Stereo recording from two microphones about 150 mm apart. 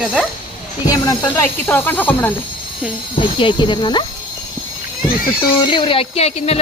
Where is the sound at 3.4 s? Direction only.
30° left (ahead or behind).